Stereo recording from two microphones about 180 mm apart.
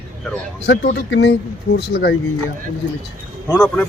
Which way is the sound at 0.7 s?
75° left (ahead or behind).